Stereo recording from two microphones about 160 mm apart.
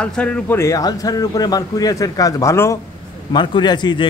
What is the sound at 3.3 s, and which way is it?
Speech, 30° left (ahead or behind).